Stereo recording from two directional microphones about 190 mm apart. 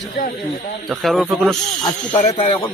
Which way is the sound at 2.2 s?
30° left (ahead or behind).